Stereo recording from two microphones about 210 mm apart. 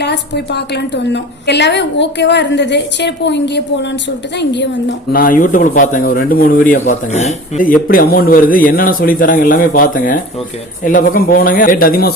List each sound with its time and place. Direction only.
0.0 s a woman's voice: 55° left (ahead or behind)